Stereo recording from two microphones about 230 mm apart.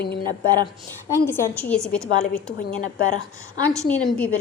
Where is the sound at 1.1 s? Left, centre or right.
Centre.